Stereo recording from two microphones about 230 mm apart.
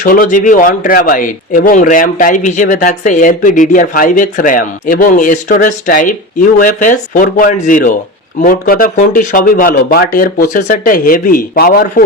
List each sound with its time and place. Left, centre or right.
0.0 s speech: left